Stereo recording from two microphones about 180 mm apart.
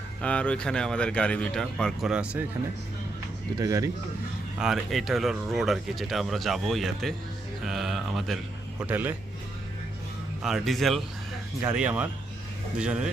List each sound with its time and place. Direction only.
0.2 s speech: 5° left (ahead or behind)
3.6 s speech: 20° right (ahead or behind)
4.6 s speech: centre (ahead or behind)
8.8 s speech: 10° right (ahead or behind)
10.4 s speech: centre (ahead or behind)